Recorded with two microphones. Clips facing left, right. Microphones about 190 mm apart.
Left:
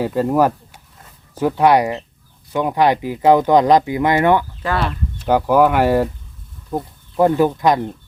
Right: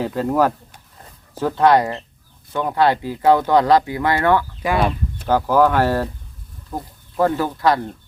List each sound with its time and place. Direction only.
0.0 s speech: 10° left (ahead or behind)
4.6 s speech: 15° right (ahead or behind)
5.2 s speech: 15° left (ahead or behind)
7.2 s speech: 15° left (ahead or behind)